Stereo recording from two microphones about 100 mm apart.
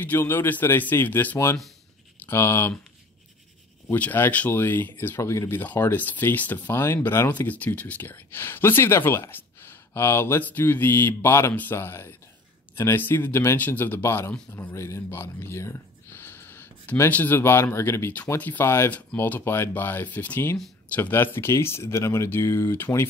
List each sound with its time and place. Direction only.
0.0 s speech: 20° left (ahead or behind)
3.9 s speech: 20° left (ahead or behind)